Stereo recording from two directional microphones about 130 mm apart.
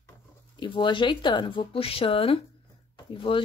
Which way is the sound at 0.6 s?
40° left (ahead or behind).